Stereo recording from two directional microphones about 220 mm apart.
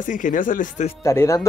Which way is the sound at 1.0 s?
15° left (ahead or behind).